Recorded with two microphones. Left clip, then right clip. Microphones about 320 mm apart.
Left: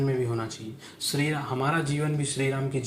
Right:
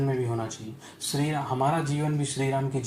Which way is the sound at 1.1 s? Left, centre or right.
Left.